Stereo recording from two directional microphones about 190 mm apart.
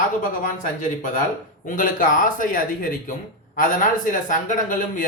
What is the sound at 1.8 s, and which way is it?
Speech, 45° left (ahead or behind).